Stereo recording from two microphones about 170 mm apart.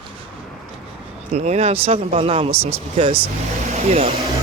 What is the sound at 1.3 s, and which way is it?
Speech, 40° right (ahead or behind).